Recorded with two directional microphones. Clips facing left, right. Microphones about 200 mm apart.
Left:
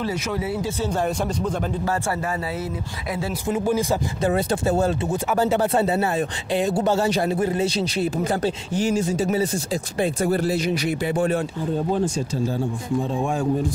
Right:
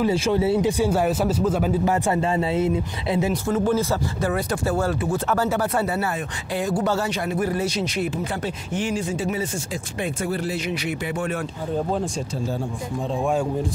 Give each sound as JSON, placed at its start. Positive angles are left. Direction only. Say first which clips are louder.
{"t": 0.1, "sound": "speech", "louder": "right 6 dB", "side_deg": -30}
{"t": 0.7, "sound": "speech", "louder": "right 4 dB", "side_deg": -10}
{"t": 1.9, "sound": "speech", "louder": "right 3 dB", "side_deg": -20}
{"t": 3.4, "sound": "speech", "louder": "left 3 dB", "side_deg": 15}